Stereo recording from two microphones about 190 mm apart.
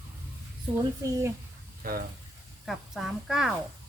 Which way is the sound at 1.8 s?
50° right (ahead or behind).